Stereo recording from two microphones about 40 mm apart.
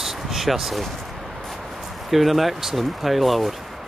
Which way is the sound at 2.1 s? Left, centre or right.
Centre.